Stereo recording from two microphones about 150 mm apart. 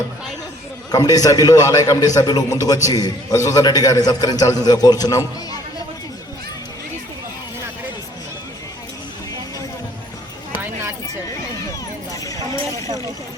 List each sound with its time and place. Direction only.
0.9 s a man's voice: 25° left (ahead or behind)
12.1 s clip-clop: 25° left (ahead or behind)